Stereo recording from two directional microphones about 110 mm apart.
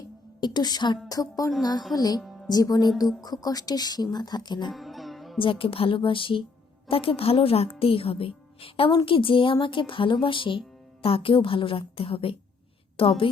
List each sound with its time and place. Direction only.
0.3 s speech: 40° left (ahead or behind)
4.7 s music: centre (ahead or behind)
5.4 s a woman's voice: 55° left (ahead or behind)